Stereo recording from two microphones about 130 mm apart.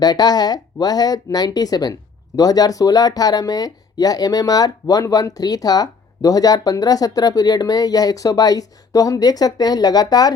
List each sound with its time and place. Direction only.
0.0 s speech: 30° left (ahead or behind)